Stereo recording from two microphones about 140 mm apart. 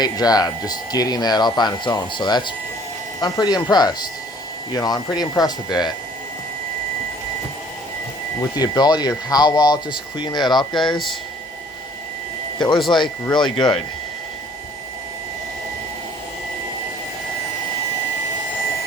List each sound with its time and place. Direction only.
0.0 s speech: 25° left (ahead or behind)
8.4 s speech: 30° left (ahead or behind)
12.5 s speech: 30° left (ahead or behind)